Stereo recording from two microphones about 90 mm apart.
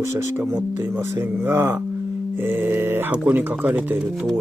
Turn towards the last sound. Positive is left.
turn(degrees=-20)  # may be behind; listen again after turning